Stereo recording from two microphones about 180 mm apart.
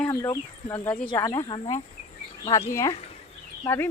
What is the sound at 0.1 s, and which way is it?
Speech, 15° left (ahead or behind).